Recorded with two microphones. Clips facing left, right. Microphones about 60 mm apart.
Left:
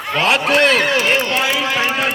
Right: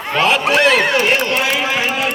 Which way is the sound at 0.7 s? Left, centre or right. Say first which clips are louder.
Right 1 dB; right.